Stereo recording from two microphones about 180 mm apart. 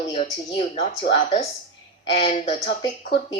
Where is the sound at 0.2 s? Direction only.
35° left (ahead or behind).